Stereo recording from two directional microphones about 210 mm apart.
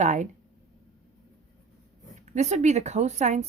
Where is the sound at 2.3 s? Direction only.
35° right (ahead or behind).